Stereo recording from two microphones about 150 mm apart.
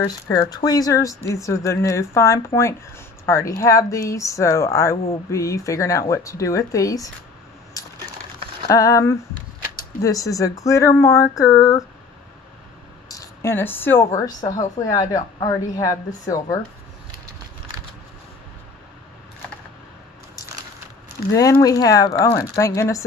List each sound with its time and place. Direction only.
0.0 s speech: 25° left (ahead or behind)
8.6 s speech: 20° left (ahead or behind)
13.1 s speech: 20° left (ahead or behind)
21.3 s speech: 20° left (ahead or behind)